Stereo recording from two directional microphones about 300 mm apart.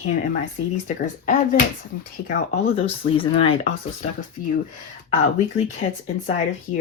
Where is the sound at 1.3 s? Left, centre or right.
Left.